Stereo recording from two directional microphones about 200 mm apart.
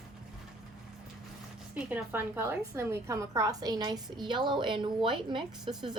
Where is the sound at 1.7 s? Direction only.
10° right (ahead or behind).